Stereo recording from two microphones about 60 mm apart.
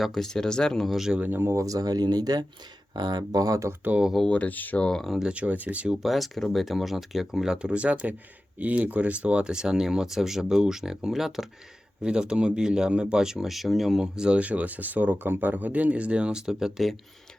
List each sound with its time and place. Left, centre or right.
0.0 s speech: centre
0.9 s speech: centre
1.2 s speech: right
1.5 s speech: right
3.3 s speech: right
4.3 s speech: left
4.8 s speech: centre
5.3 s speech: right
5.9 s speech: centre
14.0 s speech: centre